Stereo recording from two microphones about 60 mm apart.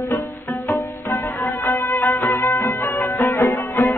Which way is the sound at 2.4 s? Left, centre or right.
Left.